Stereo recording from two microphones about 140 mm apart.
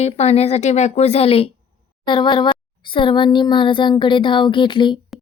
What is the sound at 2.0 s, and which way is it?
Speech, 35° left (ahead or behind).